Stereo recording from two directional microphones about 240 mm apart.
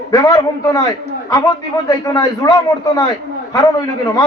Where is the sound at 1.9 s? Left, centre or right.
Centre.